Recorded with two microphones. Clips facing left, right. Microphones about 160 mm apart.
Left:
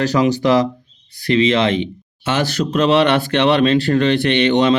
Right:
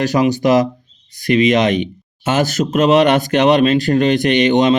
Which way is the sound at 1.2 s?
15° right (ahead or behind).